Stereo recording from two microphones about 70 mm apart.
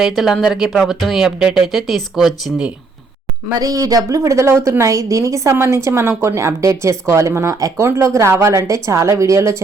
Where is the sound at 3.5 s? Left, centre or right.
Right.